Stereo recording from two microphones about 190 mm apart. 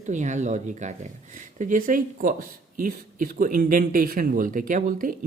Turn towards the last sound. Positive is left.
turn(degrees=-45)  # may be behind; listen again after turning